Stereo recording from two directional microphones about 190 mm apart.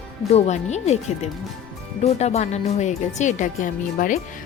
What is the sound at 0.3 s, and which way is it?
Speech, 35° left (ahead or behind).